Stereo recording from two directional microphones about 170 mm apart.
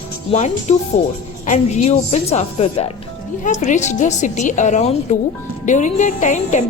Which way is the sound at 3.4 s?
45° left (ahead or behind).